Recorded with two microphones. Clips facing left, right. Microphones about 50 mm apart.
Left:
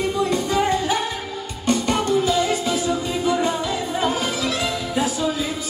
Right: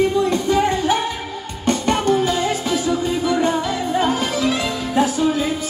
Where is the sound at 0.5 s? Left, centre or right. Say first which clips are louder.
Right 3 dB; right.